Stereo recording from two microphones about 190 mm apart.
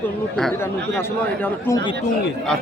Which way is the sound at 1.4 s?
15° left (ahead or behind).